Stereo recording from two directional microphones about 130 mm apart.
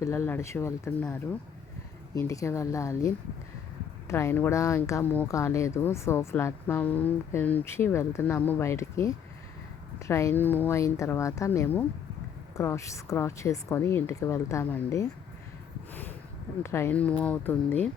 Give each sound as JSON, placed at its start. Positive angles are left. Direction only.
{"t": 0.0, "sound": "speech", "side_deg": 20}
{"t": 2.1, "sound": "speech", "side_deg": 25}
{"t": 4.1, "sound": "speech", "side_deg": 20}
{"t": 16.6, "sound": "speech", "side_deg": 20}
{"t": 16.9, "sound": "speech", "side_deg": 10}